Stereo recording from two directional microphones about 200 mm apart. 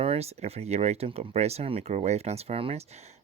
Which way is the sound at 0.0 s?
30° right (ahead or behind).